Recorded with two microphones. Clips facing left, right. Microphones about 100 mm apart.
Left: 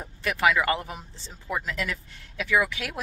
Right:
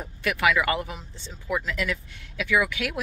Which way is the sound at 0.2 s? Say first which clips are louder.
Even; 35° left (ahead or behind).